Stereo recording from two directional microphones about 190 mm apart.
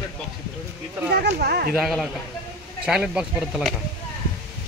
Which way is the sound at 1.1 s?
55° right (ahead or behind).